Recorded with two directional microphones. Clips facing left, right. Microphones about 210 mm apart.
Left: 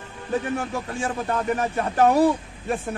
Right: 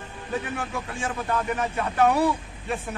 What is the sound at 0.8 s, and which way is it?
Speech, 35° left (ahead or behind).